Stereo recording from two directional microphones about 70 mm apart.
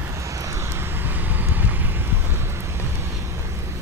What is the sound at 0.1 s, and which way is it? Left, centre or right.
Vehicle, right.